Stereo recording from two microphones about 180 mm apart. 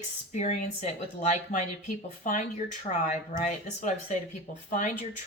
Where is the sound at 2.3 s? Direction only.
50° left (ahead or behind).